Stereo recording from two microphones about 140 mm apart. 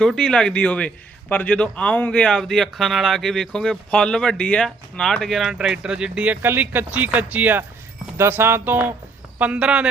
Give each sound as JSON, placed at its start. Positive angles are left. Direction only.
{"t": 0.0, "sound": "a man's voice", "side_deg": 5}